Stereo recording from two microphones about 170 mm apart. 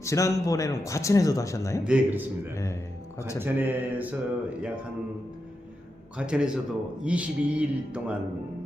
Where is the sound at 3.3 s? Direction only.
10° right (ahead or behind).